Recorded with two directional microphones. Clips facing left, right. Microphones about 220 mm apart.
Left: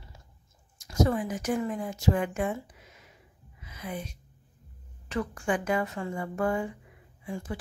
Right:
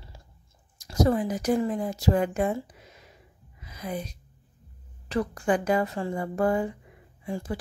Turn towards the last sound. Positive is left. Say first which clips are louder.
# right 4 dB
turn(degrees=-35)  # may be behind; listen again after turning